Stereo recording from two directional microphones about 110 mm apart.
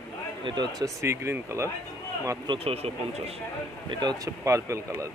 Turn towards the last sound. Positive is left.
turn(degrees=-25)  # may be behind; listen again after turning